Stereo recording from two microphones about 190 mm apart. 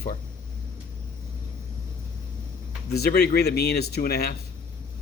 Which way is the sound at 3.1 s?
55° left (ahead or behind).